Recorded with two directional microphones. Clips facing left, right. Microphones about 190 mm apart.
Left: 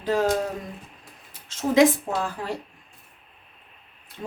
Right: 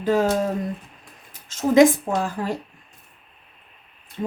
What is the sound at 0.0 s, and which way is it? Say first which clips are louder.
Speech: right 3 dB; 50° right (ahead or behind).